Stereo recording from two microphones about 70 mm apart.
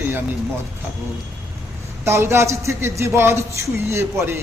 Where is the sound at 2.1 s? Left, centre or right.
Right.